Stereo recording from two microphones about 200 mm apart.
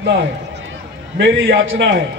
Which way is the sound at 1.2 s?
60° right (ahead or behind).